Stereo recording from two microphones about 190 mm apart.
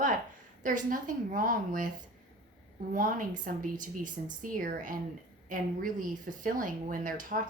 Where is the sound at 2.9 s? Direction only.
45° right (ahead or behind).